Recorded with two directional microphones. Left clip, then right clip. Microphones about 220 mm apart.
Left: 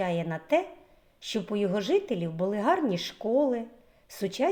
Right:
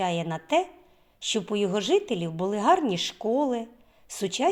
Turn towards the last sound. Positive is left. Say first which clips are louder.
# right 2 dB
turn(degrees=-30)  # may be behind; listen again after turning